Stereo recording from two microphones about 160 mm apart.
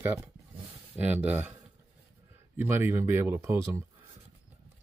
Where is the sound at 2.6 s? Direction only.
15° right (ahead or behind).